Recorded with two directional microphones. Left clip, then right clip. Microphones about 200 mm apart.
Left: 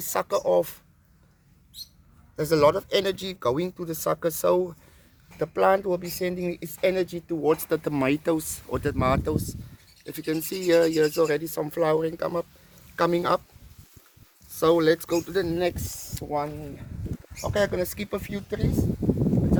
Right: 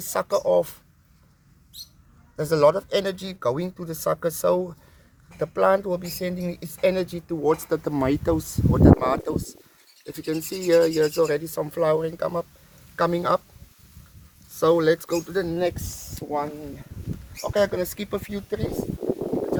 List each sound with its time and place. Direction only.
0.0 s speech: 30° left (ahead or behind)
2.3 s speech: 35° left (ahead or behind)
14.5 s speech: 25° left (ahead or behind)
17.4 s speech: 5° left (ahead or behind)